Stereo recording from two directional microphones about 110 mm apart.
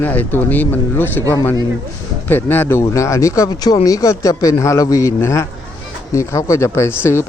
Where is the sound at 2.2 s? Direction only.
20° left (ahead or behind).